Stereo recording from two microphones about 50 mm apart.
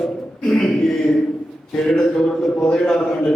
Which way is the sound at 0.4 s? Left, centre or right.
Centre.